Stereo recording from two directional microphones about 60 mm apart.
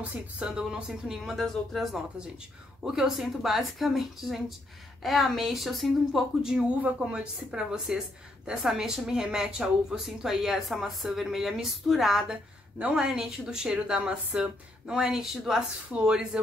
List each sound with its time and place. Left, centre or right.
0.0 s speech: right
0.5 s a woman's voice: centre
6.8 s a woman's voice: centre